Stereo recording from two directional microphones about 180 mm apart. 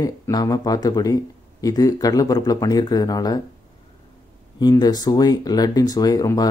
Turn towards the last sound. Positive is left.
turn(degrees=20)  # may be behind; listen again after turning